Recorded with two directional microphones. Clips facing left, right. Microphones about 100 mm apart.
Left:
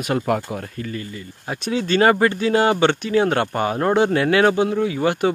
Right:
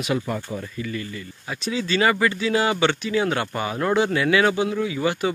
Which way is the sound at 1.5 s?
55° left (ahead or behind).